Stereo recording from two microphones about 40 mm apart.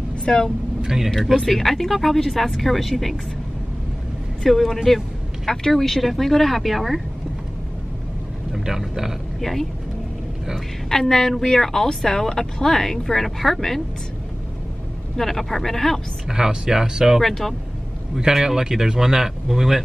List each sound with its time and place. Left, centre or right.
0.1 s vehicle: centre
0.8 s speech: centre
1.4 s speech: centre
4.4 s speech: centre
4.8 s vehicle: centre
5.5 s speech: centre
8.5 s a man's voice: centre
9.4 s speech: centre
10.9 s speech: centre
15.1 s speech: centre
16.3 s speech: centre
17.2 s speech: centre
18.2 s speech: centre